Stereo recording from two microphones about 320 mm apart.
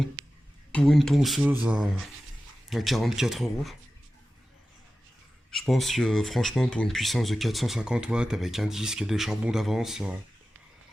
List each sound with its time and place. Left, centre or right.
0.2 s a sound: right
0.7 s speech: centre
5.5 s speech: centre